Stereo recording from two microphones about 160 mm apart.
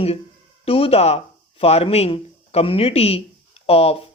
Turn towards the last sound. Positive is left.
turn(degrees=40)  # may be behind; listen again after turning